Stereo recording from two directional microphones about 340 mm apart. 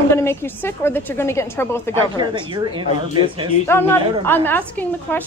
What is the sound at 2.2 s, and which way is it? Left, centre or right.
Speech, centre.